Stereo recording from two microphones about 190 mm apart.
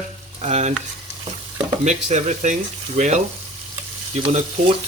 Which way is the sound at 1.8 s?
40° right (ahead or behind).